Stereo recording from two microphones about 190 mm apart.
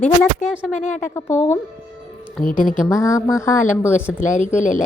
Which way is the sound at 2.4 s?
45° left (ahead or behind).